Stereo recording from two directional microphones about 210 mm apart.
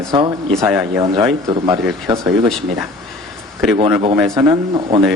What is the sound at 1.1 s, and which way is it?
Speech, 20° right (ahead or behind).